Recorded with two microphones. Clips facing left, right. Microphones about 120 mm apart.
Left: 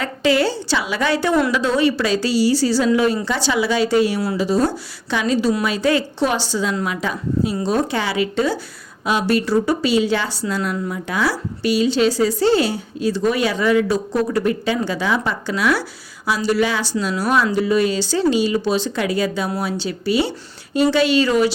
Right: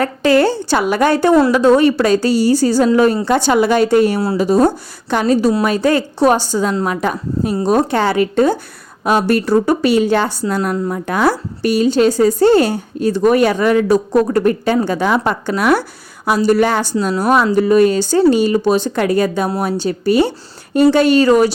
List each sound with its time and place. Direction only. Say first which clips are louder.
0.0 s a woman's voice: right 5 dB; 50° right (ahead or behind)